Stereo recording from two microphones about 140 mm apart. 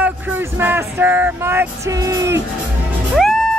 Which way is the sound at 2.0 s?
20° right (ahead or behind).